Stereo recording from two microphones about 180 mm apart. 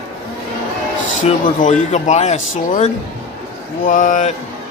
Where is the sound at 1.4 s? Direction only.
45° left (ahead or behind).